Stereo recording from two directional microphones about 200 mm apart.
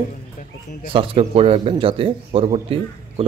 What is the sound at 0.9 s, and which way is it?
A man's voice, 30° right (ahead or behind).